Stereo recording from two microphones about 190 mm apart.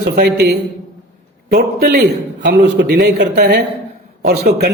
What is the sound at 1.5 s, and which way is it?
A man's voice, 55° right (ahead or behind).